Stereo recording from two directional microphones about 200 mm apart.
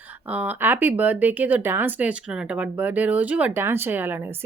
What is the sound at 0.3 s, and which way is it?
Speech, 10° right (ahead or behind).